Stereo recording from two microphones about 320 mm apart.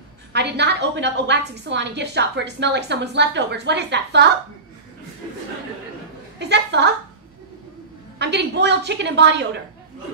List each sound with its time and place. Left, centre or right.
0.3 s a woman's voice: right
6.4 s a woman's voice: right
8.2 s a woman's voice: right